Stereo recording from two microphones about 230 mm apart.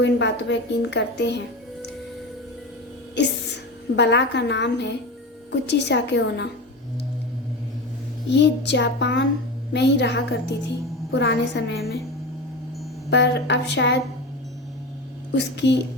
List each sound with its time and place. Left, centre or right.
0.0 s a woman's voice: left
3.2 s a woman's voice: left
8.3 s a woman's voice: left
13.1 s a woman's voice: left
15.3 s a woman's voice: left